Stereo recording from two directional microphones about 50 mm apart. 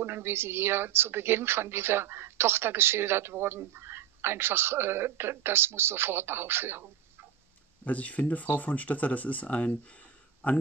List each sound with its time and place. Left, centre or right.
0.0 s speech: right
7.8 s speech: left